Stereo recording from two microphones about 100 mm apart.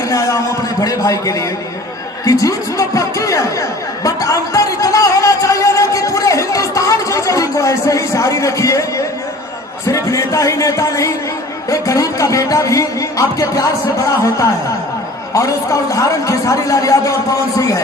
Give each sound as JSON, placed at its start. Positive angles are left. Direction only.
{"t": 0.1, "sound": "a man's voice", "side_deg": 35}
{"t": 2.2, "sound": "music", "side_deg": 35}
{"t": 9.8, "sound": "a man's voice", "side_deg": 30}
{"t": 15.3, "sound": "a man's voice", "side_deg": 35}